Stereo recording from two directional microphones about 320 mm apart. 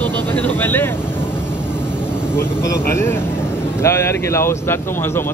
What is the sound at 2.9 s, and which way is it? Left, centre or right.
Speech, centre.